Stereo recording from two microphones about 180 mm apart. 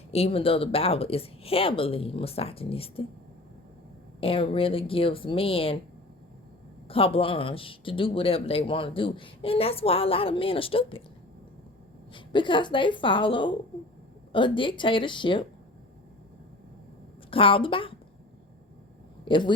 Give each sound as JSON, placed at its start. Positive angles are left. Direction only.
{"t": 0.1, "sound": "speech", "side_deg": 35}
{"t": 4.2, "sound": "speech", "side_deg": 30}
{"t": 6.8, "sound": "speech", "side_deg": 30}
{"t": 12.1, "sound": "a woman's voice", "side_deg": 25}
{"t": 17.3, "sound": "a woman's voice", "side_deg": 30}
{"t": 19.2, "sound": "speech", "side_deg": 25}